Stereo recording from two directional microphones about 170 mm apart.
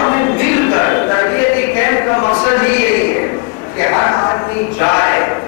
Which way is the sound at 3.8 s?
20° left (ahead or behind).